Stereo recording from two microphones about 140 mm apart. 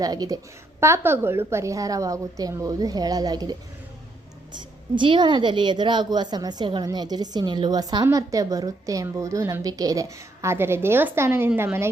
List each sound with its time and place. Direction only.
0.0 s a woman's voice: 25° right (ahead or behind)
4.9 s a woman's voice: 35° right (ahead or behind); by 11.9 s 15° right (ahead or behind)